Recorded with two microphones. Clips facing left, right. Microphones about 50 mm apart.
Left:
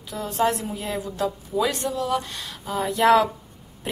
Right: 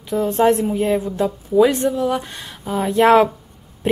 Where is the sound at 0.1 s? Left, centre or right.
Right.